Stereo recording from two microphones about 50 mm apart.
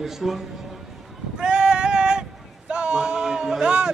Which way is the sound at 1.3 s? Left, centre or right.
Centre.